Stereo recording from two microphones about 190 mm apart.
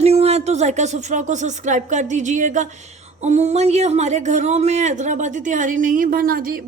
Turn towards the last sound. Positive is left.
turn(degrees=-50)  # may be behind; listen again after turning